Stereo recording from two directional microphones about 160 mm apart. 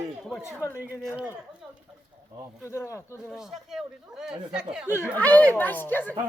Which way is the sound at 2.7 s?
15° left (ahead or behind).